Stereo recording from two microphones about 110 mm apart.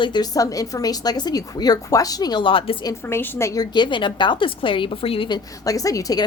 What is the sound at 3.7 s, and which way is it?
A woman's voice, 45° left (ahead or behind).